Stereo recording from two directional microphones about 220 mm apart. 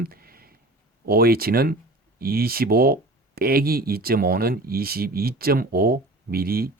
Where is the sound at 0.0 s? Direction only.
40° right (ahead or behind).